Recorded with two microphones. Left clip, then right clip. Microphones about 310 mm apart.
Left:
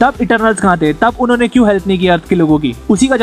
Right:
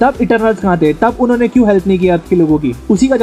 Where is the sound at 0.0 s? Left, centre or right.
Left.